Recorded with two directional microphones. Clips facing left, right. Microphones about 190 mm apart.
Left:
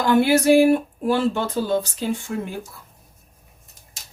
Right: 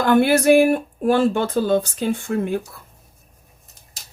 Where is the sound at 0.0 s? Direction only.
55° right (ahead or behind).